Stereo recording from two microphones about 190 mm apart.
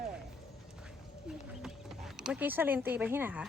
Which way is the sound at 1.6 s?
Centre (ahead or behind).